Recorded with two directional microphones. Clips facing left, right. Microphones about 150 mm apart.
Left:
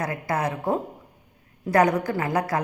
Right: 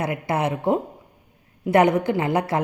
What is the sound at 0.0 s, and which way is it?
Speech, 25° right (ahead or behind).